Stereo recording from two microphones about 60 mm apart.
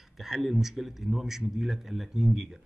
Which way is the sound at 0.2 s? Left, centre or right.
Centre.